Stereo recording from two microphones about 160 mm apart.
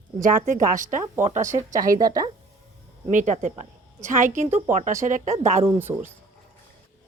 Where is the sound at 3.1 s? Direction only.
50° right (ahead or behind).